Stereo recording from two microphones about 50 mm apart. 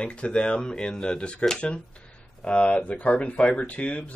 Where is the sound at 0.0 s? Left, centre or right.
Left.